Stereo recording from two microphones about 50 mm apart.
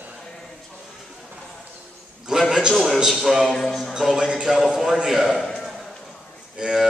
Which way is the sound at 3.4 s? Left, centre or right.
Centre.